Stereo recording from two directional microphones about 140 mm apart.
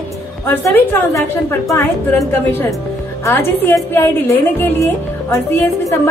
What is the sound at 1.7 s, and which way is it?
Speech, 20° left (ahead or behind).